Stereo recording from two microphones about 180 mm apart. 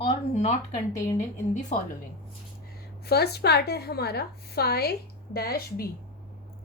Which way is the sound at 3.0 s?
65° left (ahead or behind).